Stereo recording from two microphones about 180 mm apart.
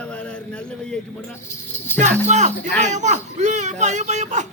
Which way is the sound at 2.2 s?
40° right (ahead or behind).